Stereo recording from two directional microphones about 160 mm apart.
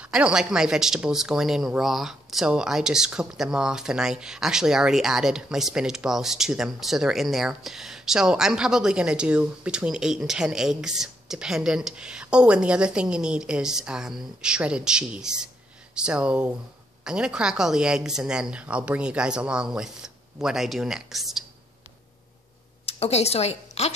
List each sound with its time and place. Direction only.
0.0 s speech: 5° right (ahead or behind)
22.8 s a woman's voice: 40° left (ahead or behind)